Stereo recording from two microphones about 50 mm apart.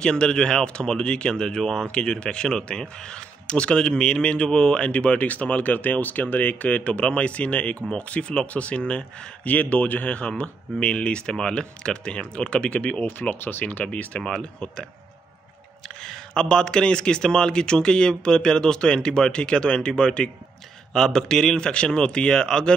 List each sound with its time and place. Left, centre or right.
0.0 s speech: centre
9.4 s speech: left
13.0 s speech: left
14.2 s a man's voice: centre
16.0 s a man's voice: centre